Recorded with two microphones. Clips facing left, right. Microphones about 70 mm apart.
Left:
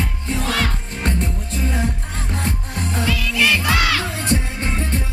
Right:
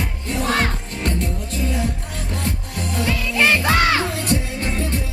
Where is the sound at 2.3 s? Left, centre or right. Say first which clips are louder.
Left 1 dB; left.